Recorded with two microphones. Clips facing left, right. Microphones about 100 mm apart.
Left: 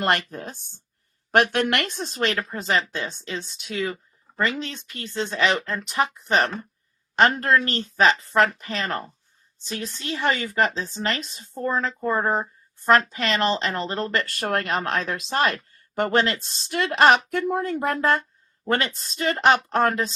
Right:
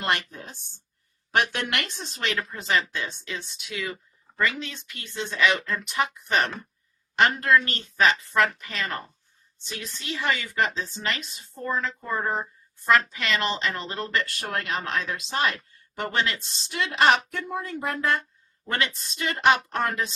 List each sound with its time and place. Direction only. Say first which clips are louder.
0.0 s a woman's voice: left 4 dB; 50° left (ahead or behind)
18.6 s a woman's voice: left 4 dB; 35° left (ahead or behind)